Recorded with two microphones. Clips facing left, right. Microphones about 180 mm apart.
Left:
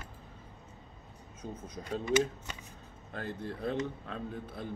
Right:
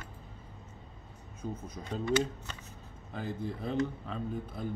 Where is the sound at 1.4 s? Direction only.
Centre (ahead or behind).